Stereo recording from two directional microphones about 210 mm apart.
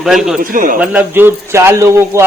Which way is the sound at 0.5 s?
40° right (ahead or behind).